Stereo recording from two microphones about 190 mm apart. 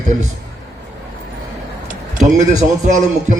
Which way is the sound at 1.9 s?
40° right (ahead or behind).